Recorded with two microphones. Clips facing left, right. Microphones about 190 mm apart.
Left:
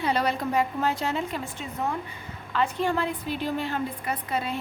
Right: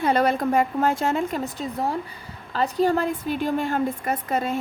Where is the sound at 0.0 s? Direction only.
50° right (ahead or behind).